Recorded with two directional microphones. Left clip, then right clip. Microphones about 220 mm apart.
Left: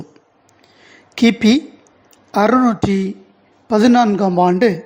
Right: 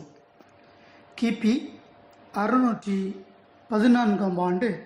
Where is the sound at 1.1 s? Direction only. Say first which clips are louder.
Left 12 dB; 35° left (ahead or behind).